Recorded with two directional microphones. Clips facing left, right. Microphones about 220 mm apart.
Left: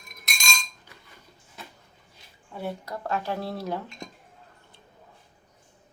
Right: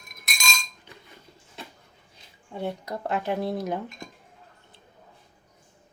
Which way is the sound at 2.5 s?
20° right (ahead or behind).